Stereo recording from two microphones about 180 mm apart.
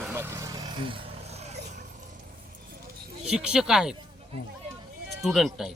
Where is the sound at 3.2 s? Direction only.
5° right (ahead or behind).